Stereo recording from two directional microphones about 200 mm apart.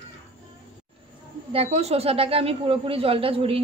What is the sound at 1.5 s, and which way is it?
Speech, 30° right (ahead or behind).